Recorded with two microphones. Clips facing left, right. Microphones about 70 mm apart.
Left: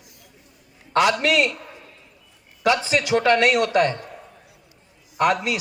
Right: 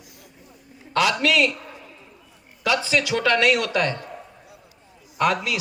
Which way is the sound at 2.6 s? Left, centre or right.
Left.